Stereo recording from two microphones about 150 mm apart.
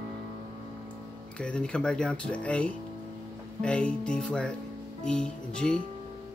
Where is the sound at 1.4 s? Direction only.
5° left (ahead or behind).